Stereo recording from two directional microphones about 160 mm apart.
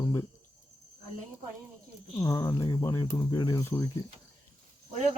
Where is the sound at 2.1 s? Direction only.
20° left (ahead or behind).